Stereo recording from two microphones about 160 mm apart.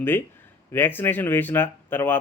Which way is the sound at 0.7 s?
15° left (ahead or behind).